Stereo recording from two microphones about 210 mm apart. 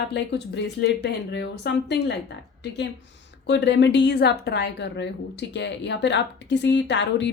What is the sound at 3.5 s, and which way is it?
Speech, 55° left (ahead or behind).